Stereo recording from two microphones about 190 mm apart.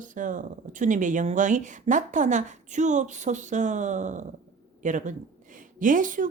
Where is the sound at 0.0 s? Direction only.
45° right (ahead or behind).